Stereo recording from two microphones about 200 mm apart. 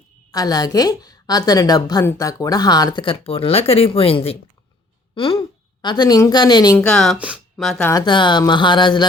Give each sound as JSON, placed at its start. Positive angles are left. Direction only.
{"t": 0.3, "sound": "a woman's voice", "side_deg": 20}
{"t": 6.7, "sound": "speech", "side_deg": 5}
{"t": 7.9, "sound": "a woman's voice", "side_deg": 20}